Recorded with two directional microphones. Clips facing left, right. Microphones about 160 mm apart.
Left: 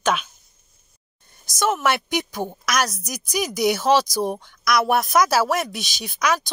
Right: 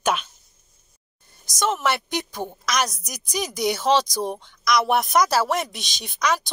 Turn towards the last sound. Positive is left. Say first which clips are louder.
# left 1 dB
turn(degrees=5)  # may be behind; listen again after turning